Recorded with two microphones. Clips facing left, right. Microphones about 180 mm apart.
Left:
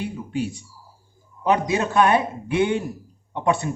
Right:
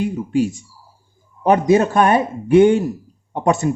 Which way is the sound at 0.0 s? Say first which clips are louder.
Right 8 dB; 45° right (ahead or behind).